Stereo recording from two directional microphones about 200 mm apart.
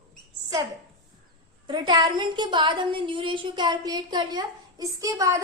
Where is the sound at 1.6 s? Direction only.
25° right (ahead or behind).